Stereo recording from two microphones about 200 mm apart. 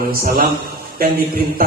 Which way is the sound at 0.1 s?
50° right (ahead or behind).